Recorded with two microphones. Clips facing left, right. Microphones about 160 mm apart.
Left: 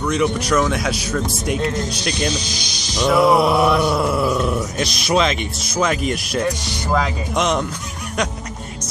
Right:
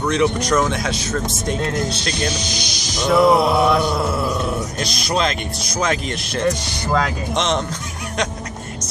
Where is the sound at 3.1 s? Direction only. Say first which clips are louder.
Right 1 dB; 5° left (ahead or behind).